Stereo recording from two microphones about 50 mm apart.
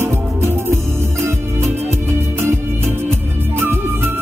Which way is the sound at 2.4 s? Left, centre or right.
Right.